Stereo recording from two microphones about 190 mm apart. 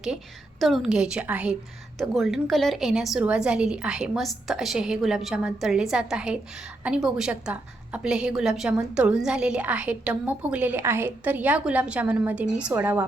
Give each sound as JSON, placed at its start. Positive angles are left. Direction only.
{"t": 0.6, "sound": "a woman's voice", "side_deg": 0}